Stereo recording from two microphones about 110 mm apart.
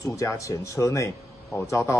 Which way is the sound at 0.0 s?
30° left (ahead or behind).